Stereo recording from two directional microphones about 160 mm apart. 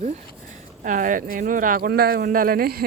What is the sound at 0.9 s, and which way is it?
Speech, 55° right (ahead or behind).